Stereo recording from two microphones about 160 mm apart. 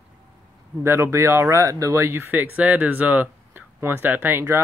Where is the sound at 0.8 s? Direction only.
15° right (ahead or behind).